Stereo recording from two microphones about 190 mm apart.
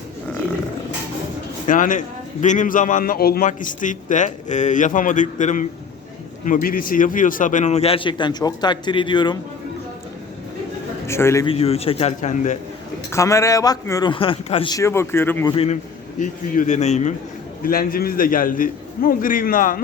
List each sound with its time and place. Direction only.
1.6 s a man's voice: 45° left (ahead or behind); by 9.4 s 25° left (ahead or behind)
11.0 s a man's voice: 15° left (ahead or behind)
11.4 s a man's voice: 30° left (ahead or behind)
13.1 s a man's voice: 15° left (ahead or behind)
15.5 s a man's voice: 30° left (ahead or behind)
17.6 s a man's voice: 50° left (ahead or behind)